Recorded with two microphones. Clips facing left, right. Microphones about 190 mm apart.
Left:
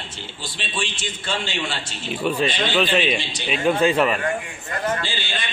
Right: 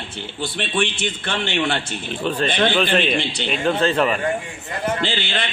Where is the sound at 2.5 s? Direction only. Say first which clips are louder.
Right 5 dB; 55° right (ahead or behind).